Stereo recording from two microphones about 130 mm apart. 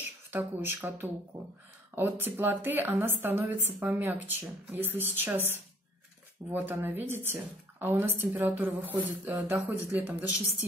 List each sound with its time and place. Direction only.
0.0 s a woman's voice: 15° right (ahead or behind)